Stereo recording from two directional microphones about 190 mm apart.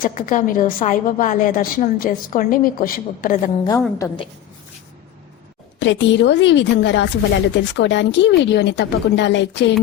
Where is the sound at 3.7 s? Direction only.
15° left (ahead or behind).